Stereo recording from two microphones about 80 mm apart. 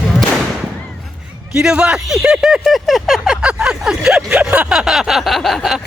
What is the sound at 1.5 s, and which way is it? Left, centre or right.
Speech, centre.